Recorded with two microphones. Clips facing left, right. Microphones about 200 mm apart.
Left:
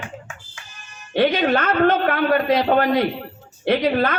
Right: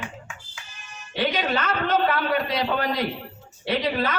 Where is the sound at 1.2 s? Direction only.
55° left (ahead or behind).